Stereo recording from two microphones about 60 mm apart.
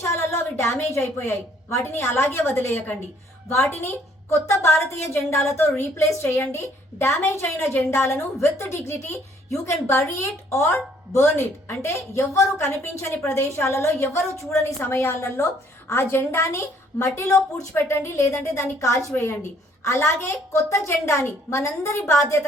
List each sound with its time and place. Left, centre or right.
0.1 s a sound: left
1.7 s a woman's voice: left
4.3 s a woman's voice: left
14.8 s a woman's voice: left